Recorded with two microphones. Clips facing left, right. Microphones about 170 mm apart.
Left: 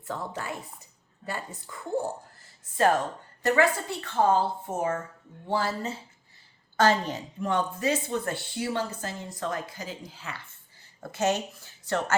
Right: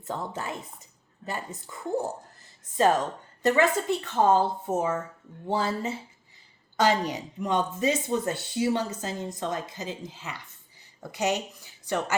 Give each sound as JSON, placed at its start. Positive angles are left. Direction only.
{"t": 0.0, "sound": "speech", "side_deg": -20}
{"t": 3.4, "sound": "speech", "side_deg": -20}
{"t": 6.7, "sound": "speech", "side_deg": -15}